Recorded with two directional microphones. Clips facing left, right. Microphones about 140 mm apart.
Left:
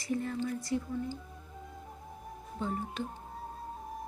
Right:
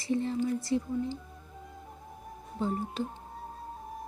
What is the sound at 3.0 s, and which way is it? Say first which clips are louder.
Music: right 3 dB; centre (ahead or behind).